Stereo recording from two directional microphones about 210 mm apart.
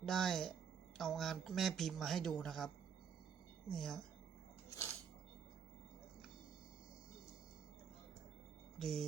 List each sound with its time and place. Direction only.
0.0 s speech: centre (ahead or behind)
8.8 s speech: centre (ahead or behind)